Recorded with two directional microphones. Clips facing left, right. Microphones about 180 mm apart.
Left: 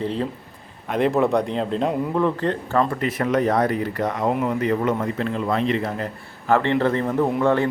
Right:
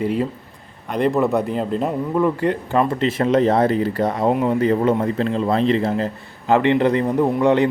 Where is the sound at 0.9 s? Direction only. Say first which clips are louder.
Right 1 dB; centre (ahead or behind).